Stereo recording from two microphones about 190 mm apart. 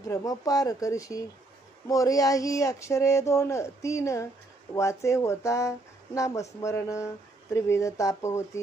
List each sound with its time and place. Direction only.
0.1 s speech: 20° left (ahead or behind)